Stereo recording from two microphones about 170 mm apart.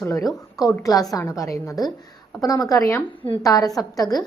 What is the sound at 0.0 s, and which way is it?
A woman's voice, 20° left (ahead or behind).